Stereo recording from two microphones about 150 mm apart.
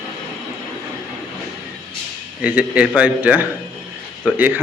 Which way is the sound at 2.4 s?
10° right (ahead or behind).